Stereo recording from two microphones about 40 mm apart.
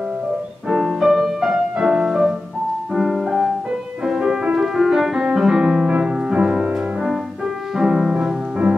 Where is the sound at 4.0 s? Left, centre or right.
Centre.